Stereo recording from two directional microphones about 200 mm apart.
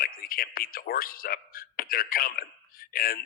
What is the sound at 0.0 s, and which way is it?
Speech, 45° left (ahead or behind).